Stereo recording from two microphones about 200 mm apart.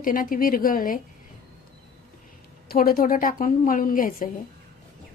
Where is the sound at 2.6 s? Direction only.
45° left (ahead or behind).